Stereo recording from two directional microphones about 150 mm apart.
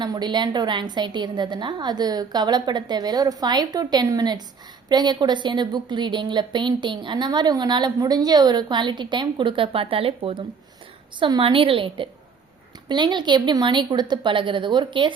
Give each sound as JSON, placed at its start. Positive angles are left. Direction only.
{"t": 0.0, "sound": "a woman's voice", "side_deg": -30}